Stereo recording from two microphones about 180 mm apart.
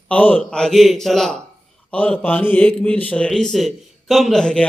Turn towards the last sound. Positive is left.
turn(degrees=5)  # may be behind; listen again after turning